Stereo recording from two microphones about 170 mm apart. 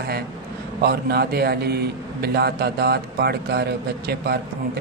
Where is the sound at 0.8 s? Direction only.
65° right (ahead or behind).